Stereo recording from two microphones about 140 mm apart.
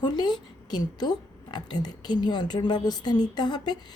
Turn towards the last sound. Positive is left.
turn(degrees=30)  # may be behind; listen again after turning